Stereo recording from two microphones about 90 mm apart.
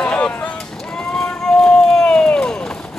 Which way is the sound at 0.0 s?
15° left (ahead or behind).